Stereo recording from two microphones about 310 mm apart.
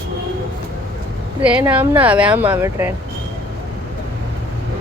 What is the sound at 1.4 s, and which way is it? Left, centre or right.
Speech, centre.